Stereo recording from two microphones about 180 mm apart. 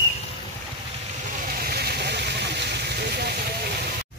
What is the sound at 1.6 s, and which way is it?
Vehicle, 60° right (ahead or behind).